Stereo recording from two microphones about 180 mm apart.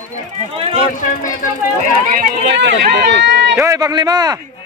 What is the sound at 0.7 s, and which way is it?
Speech, 45° left (ahead or behind).